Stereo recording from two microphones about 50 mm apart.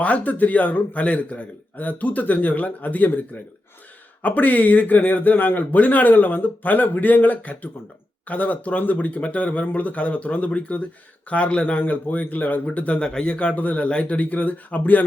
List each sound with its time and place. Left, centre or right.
0.0 s speech: left
13.0 s speech: centre; by 15.0 s left